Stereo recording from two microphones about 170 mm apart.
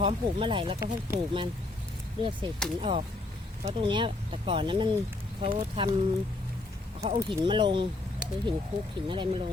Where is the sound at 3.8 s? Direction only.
30° right (ahead or behind).